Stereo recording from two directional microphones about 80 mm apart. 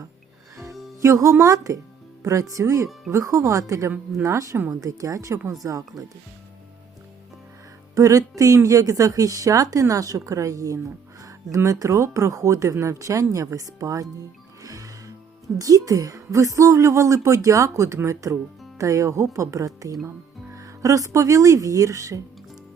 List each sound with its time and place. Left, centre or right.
1.0 s a woman's voice: right
7.9 s a woman's voice: right
14.6 s music: right
15.5 s a woman's voice: right